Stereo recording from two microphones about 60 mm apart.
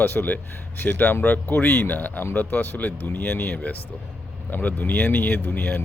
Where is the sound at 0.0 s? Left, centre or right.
Left.